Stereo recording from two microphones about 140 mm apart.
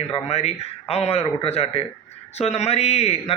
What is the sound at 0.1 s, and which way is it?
A man's voice, 50° left (ahead or behind).